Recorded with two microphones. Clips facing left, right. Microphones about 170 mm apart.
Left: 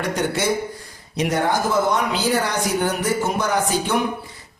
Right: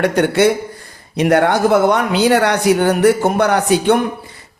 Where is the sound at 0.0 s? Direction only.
65° right (ahead or behind).